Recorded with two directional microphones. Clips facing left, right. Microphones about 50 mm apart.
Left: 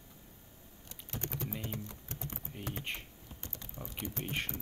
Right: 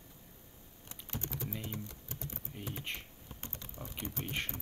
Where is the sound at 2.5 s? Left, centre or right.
Centre.